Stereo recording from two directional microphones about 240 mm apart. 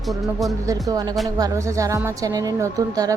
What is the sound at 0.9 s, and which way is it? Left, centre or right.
Speech, centre.